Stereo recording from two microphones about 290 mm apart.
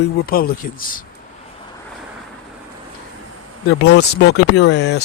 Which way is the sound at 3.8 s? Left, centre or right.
Left.